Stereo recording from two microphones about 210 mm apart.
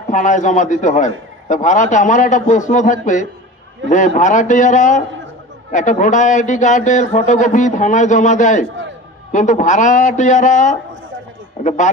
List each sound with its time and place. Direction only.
0.1 s a man's voice: 35° left (ahead or behind)